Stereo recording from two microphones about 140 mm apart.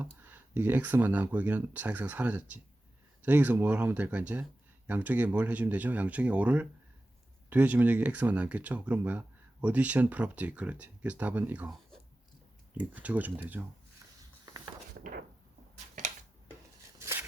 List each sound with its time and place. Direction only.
0.0 s speech: 15° right (ahead or behind)
12.7 s speech: 10° right (ahead or behind)
17.0 s a sound: 15° right (ahead or behind)